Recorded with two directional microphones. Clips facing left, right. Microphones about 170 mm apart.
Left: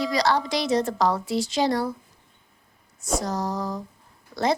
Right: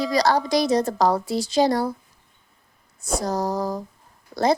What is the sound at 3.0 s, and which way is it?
A woman's voice, 35° right (ahead or behind).